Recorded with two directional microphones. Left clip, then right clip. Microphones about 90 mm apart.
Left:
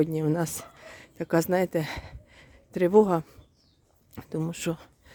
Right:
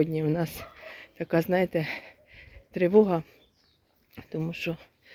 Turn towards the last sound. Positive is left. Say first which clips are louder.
# left 1 dB
turn(degrees=75)  # may be behind; listen again after turning